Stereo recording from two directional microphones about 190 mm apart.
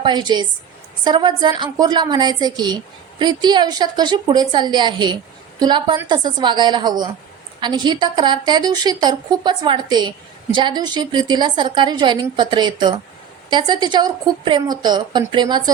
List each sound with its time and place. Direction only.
0.0 s a woman's voice: 25° right (ahead or behind)